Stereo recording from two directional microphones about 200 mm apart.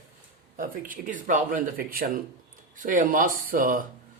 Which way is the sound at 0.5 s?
45° right (ahead or behind).